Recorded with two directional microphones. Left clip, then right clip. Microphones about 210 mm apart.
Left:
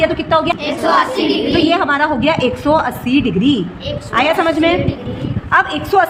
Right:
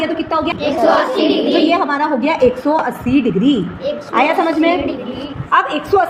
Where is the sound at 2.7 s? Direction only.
45° left (ahead or behind).